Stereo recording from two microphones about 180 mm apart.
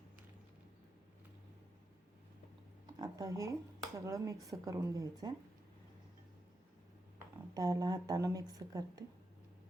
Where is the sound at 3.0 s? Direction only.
20° right (ahead or behind).